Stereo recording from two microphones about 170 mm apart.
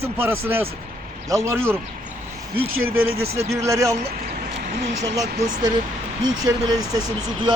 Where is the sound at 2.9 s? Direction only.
60° right (ahead or behind).